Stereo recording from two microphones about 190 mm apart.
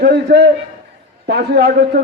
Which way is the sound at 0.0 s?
55° right (ahead or behind).